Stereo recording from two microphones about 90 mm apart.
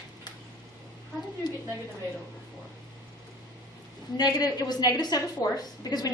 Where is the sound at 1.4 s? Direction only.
50° left (ahead or behind).